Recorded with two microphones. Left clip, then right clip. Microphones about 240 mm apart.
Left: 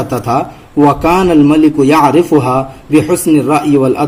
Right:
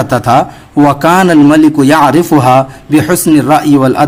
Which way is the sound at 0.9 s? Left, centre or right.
Right.